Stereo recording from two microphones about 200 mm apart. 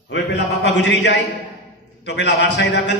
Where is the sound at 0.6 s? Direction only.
60° left (ahead or behind).